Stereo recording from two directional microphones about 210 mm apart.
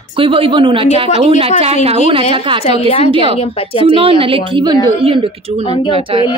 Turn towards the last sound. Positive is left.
turn(degrees=-25)  # may be behind; listen again after turning